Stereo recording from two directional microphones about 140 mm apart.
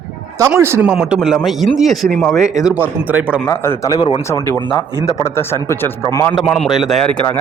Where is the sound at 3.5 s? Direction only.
20° left (ahead or behind).